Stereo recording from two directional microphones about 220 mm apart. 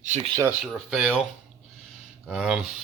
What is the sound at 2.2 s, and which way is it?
Speech, 5° right (ahead or behind).